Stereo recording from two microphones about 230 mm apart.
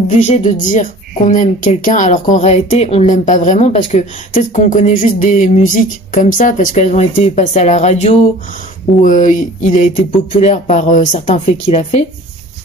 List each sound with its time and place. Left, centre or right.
0.1 s speech: left